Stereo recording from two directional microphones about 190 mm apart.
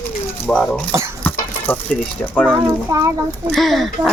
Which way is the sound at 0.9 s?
15° right (ahead or behind).